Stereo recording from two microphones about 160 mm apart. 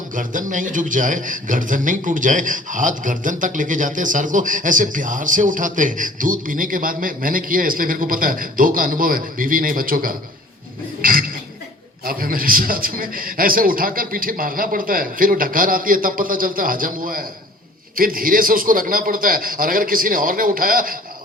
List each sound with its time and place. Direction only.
0.2 s a man's voice: 55° right (ahead or behind)
11.0 s a sound: 60° right (ahead or behind)
12.0 s a man's voice: 60° right (ahead or behind)